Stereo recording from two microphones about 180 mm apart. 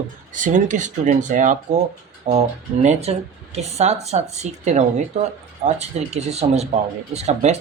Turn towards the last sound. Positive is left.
turn(degrees=-40)  # may be behind; listen again after turning